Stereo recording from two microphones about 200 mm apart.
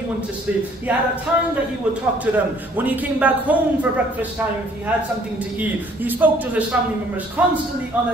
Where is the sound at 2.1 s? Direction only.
10° right (ahead or behind).